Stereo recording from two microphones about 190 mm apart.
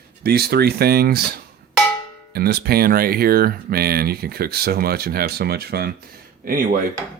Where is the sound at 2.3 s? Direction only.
55° right (ahead or behind).